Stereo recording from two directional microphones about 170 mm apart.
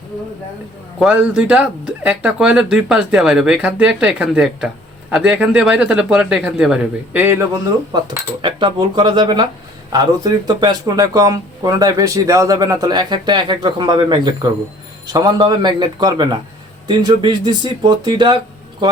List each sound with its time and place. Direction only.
0.9 s speech: 5° right (ahead or behind)
7.9 s speech: 25° right (ahead or behind)